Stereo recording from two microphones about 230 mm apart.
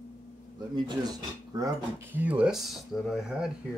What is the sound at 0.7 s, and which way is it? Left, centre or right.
Speech, centre.